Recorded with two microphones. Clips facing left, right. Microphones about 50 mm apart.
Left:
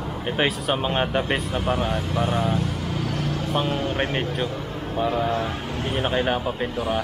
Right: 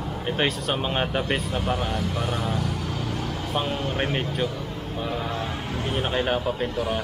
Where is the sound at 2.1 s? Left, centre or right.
Left.